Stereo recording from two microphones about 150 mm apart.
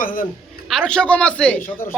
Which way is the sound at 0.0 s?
65° left (ahead or behind).